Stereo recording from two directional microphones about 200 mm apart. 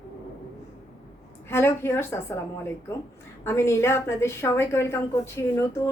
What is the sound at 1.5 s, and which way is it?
A woman's voice, 10° left (ahead or behind).